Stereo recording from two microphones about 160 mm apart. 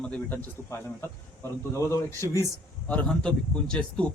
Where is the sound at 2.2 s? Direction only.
20° right (ahead or behind).